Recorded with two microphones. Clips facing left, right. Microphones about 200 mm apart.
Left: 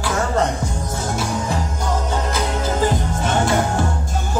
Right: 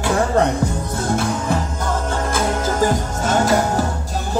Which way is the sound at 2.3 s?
45° right (ahead or behind).